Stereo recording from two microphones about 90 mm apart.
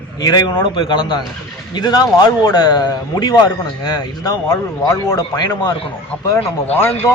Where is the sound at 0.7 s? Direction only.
60° left (ahead or behind); by 5.2 s 35° left (ahead or behind).